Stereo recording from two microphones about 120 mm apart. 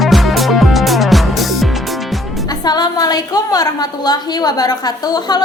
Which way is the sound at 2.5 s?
35° left (ahead or behind).